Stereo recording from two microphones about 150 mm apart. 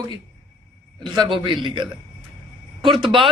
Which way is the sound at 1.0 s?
30° right (ahead or behind).